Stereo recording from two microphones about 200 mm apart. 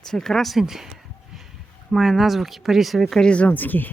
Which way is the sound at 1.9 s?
Centre (ahead or behind).